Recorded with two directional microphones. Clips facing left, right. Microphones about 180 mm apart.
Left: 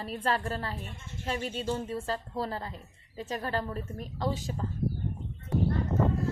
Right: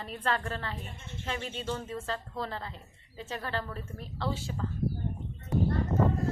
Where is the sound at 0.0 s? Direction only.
35° left (ahead or behind).